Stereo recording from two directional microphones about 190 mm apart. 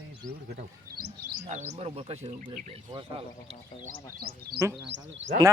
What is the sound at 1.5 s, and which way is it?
Speech, 35° right (ahead or behind).